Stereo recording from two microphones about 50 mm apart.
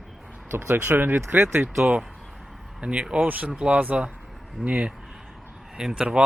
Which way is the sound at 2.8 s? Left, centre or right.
Right.